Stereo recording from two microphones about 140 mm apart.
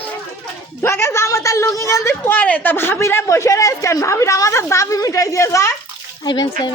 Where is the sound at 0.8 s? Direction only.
20° left (ahead or behind).